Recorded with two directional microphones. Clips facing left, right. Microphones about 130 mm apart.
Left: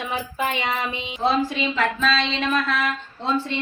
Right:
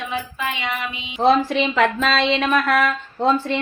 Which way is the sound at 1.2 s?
70° right (ahead or behind).